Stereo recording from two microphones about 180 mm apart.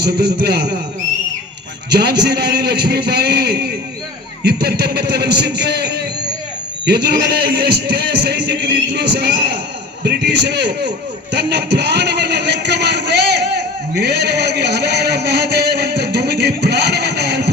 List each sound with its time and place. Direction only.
0.0 s a man's voice: 65° right (ahead or behind)
1.9 s a man's voice: 65° right (ahead or behind)
10.0 s a sound: 65° right (ahead or behind)